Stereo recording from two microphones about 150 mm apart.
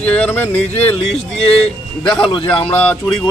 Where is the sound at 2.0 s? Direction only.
35° left (ahead or behind).